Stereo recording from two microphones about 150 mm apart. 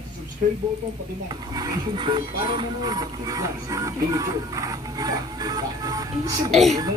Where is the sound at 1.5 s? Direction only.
25° right (ahead or behind).